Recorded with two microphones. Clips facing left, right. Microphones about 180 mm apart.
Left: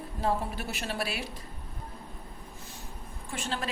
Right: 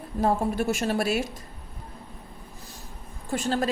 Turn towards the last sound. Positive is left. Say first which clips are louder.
# right 9 dB
turn(degrees=-40)  # may be behind; listen again after turning